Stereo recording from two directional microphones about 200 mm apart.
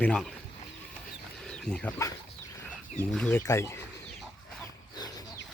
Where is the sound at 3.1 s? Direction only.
10° left (ahead or behind).